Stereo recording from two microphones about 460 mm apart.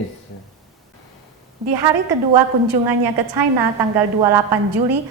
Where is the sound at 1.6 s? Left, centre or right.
Right.